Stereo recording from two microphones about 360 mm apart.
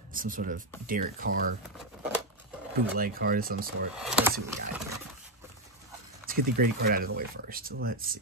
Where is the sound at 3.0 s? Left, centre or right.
Right.